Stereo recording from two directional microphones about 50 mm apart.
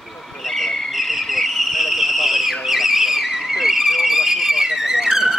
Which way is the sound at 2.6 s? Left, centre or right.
Centre.